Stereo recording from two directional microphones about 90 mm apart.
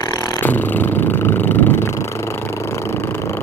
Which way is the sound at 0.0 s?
50° left (ahead or behind).